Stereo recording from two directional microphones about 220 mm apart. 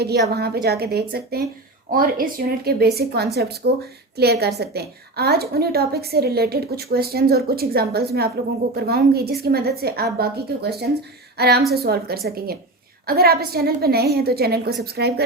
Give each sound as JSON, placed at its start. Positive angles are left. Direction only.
{"t": 0.0, "sound": "a woman's voice", "side_deg": -45}